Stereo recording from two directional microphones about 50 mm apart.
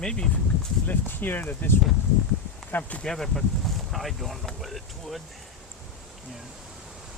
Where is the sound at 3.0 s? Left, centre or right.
Centre.